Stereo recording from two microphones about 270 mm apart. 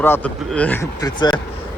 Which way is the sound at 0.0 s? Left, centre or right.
Centre.